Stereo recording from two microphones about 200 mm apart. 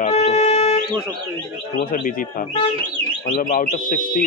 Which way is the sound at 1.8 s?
45° left (ahead or behind).